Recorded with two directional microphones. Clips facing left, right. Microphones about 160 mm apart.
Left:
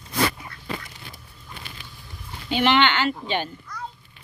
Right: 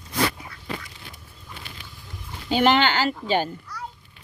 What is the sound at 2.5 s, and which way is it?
Speech, 40° right (ahead or behind).